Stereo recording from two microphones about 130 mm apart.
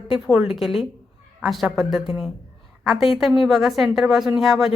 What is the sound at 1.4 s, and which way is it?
Speech, centre (ahead or behind).